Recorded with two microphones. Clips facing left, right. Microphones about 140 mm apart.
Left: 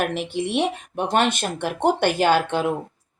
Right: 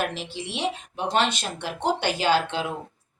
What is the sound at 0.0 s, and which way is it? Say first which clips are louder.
Speech: left 6 dB; 55° left (ahead or behind).